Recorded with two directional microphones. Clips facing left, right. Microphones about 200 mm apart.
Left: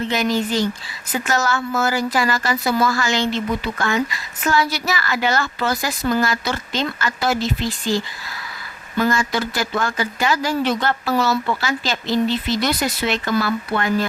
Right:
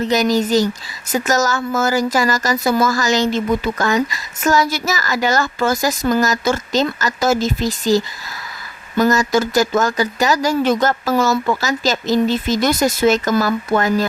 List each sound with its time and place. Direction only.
0.0 s speech: 40° right (ahead or behind)